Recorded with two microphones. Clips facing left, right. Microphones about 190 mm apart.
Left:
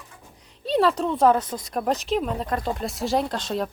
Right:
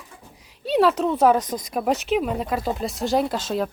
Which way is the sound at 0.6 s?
5° right (ahead or behind).